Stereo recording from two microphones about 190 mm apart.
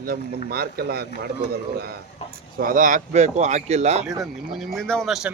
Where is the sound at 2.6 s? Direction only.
45° right (ahead or behind).